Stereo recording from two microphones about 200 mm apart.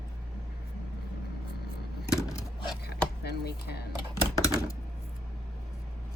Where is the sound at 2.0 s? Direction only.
20° left (ahead or behind).